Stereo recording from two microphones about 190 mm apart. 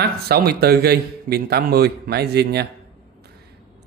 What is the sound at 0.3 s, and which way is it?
Speech, 55° right (ahead or behind).